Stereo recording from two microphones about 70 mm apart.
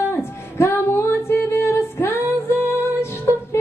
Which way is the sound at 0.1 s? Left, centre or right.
Left.